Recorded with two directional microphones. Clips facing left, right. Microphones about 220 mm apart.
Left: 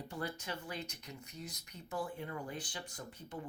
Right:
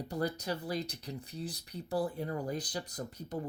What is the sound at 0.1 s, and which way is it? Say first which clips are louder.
Speech: right 8 dB; 40° right (ahead or behind).